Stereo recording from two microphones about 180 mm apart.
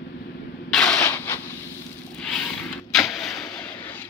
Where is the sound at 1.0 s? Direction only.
15° left (ahead or behind).